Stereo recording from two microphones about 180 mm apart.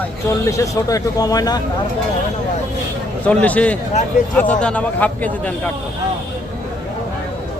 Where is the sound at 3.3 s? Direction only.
10° left (ahead or behind).